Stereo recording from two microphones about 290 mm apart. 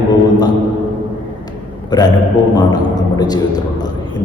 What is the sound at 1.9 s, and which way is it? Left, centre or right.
A man's voice, centre.